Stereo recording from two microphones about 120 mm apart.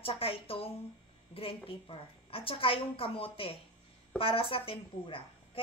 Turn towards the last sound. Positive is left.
turn(degrees=50)  # may be behind; listen again after turning